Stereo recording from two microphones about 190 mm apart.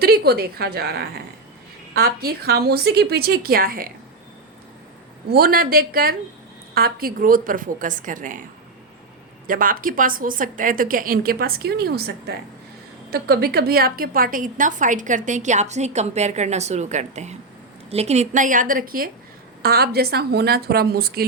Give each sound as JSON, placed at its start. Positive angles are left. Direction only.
{"t": 0.0, "sound": "a woman's voice", "side_deg": -55}
{"t": 5.3, "sound": "a woman's voice", "side_deg": -50}
{"t": 9.5, "sound": "a woman's voice", "side_deg": -45}